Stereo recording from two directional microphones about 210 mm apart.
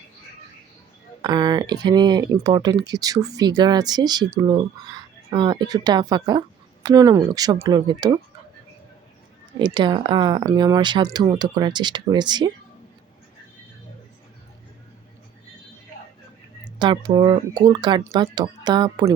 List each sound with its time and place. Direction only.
1.2 s speech: 20° right (ahead or behind)
9.6 s speech: 20° right (ahead or behind)
16.7 s speech: 20° right (ahead or behind)